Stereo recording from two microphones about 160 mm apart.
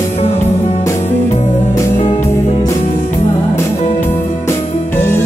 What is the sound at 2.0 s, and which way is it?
Music, 40° left (ahead or behind).